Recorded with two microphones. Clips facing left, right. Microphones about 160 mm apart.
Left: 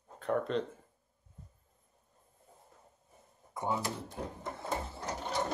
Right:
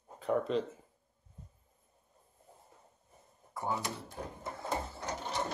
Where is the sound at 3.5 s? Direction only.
20° left (ahead or behind).